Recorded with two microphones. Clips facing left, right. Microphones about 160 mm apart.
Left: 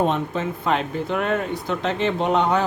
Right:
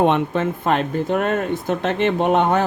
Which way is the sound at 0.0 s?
60° right (ahead or behind).